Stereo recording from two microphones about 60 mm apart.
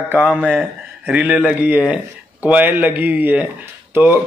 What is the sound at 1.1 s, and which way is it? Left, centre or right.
Speech, right.